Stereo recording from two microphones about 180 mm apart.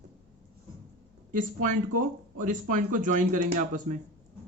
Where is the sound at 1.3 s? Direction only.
45° right (ahead or behind).